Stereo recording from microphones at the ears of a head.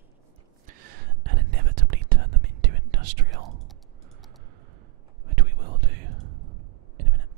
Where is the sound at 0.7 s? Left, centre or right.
Right.